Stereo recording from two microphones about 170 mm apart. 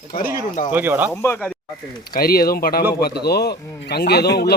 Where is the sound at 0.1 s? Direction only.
60° left (ahead or behind).